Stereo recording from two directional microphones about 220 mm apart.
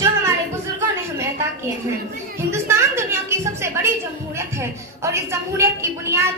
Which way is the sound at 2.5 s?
10° right (ahead or behind).